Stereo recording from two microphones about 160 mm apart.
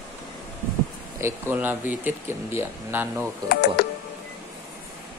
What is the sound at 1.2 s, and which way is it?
Speech, 15° right (ahead or behind).